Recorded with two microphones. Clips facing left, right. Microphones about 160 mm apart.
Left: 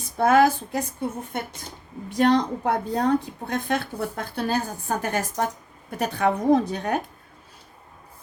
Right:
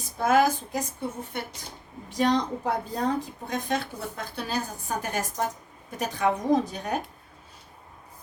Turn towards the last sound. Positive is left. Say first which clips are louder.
# left 4 dB
turn(degrees=60)  # may be behind; listen again after turning